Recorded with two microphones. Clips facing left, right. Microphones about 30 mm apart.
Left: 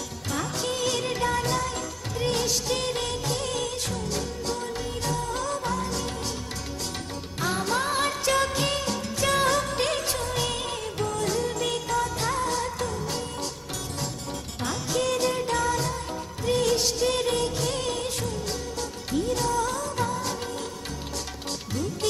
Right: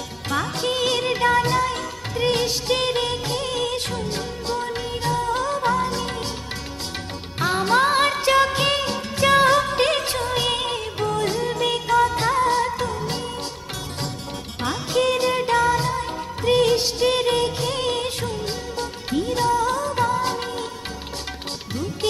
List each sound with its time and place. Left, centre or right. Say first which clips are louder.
0.3 s music of bollywood: right 6 dB; right
7.3 s music of bollywood: right 8 dB; right
14.6 s music: right 6 dB; right